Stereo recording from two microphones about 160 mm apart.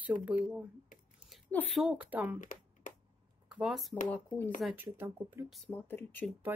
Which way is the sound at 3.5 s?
5° right (ahead or behind).